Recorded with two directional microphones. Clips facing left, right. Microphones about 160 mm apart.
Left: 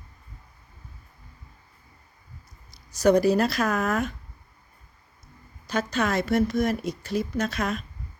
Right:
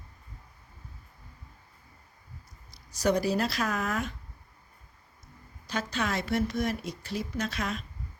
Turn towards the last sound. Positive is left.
turn(degrees=50)  # may be behind; listen again after turning